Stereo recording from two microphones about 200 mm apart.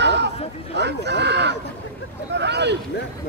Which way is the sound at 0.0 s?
60° right (ahead or behind).